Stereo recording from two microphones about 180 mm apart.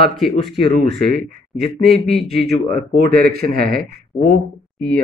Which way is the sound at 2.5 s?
60° right (ahead or behind).